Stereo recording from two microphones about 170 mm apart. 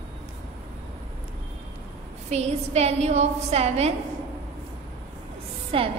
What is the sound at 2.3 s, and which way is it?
A woman's voice, 40° right (ahead or behind).